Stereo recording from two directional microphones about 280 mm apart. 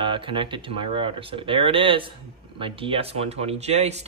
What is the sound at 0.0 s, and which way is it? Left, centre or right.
Speech, centre.